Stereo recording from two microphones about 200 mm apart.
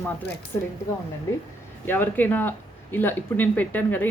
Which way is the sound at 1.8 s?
10° left (ahead or behind).